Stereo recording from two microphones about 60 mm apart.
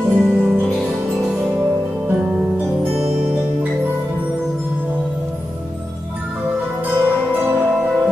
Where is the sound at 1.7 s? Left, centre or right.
Right.